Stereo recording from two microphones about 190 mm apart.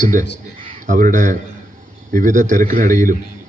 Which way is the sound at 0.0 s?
45° right (ahead or behind).